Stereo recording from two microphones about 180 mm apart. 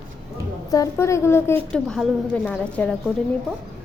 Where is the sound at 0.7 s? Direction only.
15° left (ahead or behind).